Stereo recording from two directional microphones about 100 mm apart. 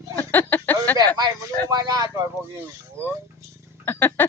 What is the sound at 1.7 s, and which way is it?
Speech, 40° right (ahead or behind).